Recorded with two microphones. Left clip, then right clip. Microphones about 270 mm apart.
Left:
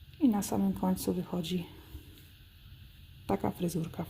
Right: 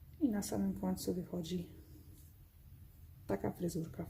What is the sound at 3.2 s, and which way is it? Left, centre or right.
Speech, left.